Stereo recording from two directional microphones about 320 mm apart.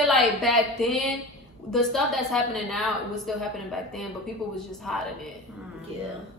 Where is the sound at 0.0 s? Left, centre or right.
Centre.